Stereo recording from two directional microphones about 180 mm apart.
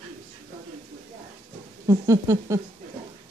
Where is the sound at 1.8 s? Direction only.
15° right (ahead or behind).